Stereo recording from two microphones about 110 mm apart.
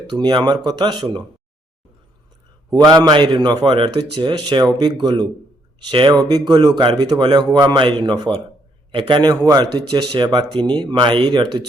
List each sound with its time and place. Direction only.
0.1 s speech: 40° right (ahead or behind)
2.8 s speech: 35° right (ahead or behind)